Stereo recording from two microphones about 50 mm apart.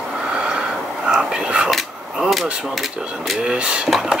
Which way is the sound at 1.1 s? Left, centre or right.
Centre.